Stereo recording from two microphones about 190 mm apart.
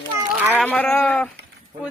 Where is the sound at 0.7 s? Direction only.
5° left (ahead or behind).